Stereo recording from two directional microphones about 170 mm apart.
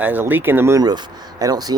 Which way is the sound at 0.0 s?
10° right (ahead or behind).